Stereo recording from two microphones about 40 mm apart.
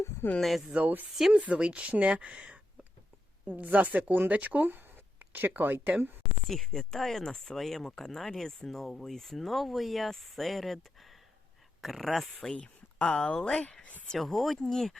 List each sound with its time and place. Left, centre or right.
0.4 s speech: centre
0.7 s speech: right
1.3 s speech: right
3.4 s speech: right
5.2 s speech: right
6.5 s speech: centre
11.8 s speech: centre
12.3 s speech: centre
12.5 s speech: left
14.2 s speech: centre